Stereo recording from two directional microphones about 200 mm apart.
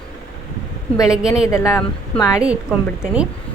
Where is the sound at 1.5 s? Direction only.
15° left (ahead or behind).